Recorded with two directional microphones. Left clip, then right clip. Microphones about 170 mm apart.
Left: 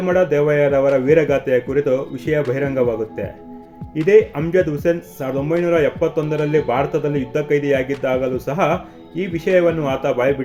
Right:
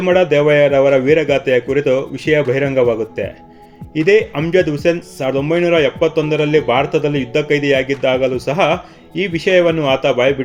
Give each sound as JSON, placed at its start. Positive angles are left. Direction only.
{"t": 0.0, "sound": "speech", "side_deg": -25}